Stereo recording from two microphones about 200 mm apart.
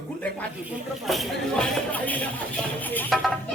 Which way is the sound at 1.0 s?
Centre (ahead or behind).